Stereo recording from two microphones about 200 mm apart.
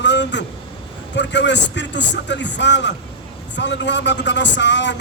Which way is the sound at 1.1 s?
60° left (ahead or behind).